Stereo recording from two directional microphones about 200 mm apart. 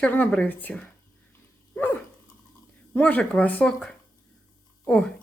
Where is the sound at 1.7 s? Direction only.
10° left (ahead or behind).